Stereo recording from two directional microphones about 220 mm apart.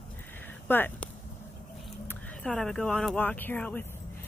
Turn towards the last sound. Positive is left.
turn(degrees=10)  # may be behind; listen again after turning